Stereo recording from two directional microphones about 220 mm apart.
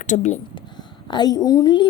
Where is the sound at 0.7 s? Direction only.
20° left (ahead or behind).